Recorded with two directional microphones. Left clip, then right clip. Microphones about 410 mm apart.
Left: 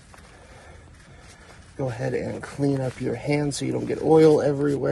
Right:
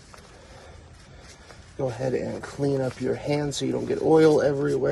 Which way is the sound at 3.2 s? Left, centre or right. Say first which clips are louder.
Left 5 dB; left.